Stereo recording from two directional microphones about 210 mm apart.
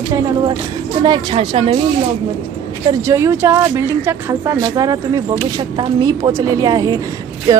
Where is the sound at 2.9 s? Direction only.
15° right (ahead or behind).